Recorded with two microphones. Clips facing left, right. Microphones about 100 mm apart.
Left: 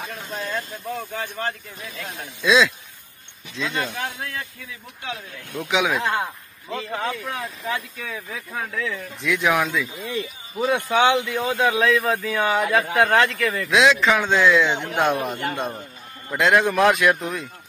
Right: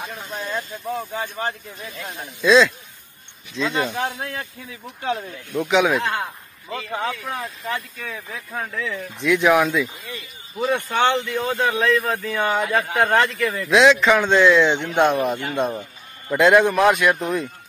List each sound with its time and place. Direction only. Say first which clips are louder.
0.3 s a man's voice: even; centre (ahead or behind)
1.1 s speech: right 2 dB; 15° right (ahead or behind)
2.4 s a man's voice: right 3 dB; centre (ahead or behind)
3.7 s speech: right 3 dB; 20° right (ahead or behind)
5.6 s a man's voice: right 4 dB; centre (ahead or behind)